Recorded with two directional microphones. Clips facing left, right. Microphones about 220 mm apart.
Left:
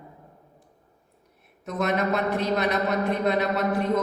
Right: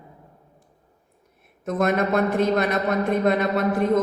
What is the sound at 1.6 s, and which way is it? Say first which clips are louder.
A woman's voice: right 4 dB; 50° right (ahead or behind).